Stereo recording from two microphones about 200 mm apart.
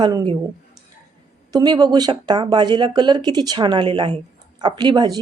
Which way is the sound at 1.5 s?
20° right (ahead or behind).